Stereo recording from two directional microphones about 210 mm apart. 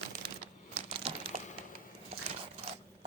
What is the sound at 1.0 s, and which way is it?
Crumpling, 25° right (ahead or behind).